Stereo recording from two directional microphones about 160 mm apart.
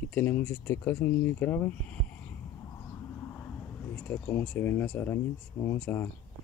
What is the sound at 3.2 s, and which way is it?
Speech, 15° left (ahead or behind).